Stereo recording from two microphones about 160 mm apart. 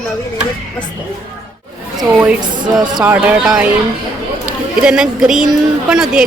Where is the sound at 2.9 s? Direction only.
10° right (ahead or behind).